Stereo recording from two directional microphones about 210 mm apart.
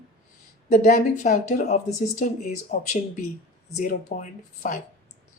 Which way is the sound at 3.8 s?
40° left (ahead or behind).